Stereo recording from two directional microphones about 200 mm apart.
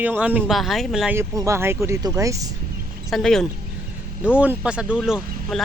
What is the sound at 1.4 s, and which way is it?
Speech, 15° right (ahead or behind).